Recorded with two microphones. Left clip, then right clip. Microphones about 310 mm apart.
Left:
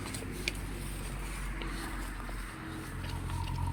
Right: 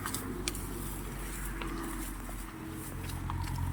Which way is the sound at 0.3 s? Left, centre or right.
Centre.